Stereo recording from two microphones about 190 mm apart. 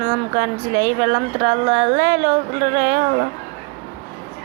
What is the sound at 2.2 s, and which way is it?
Speech, 45° right (ahead or behind).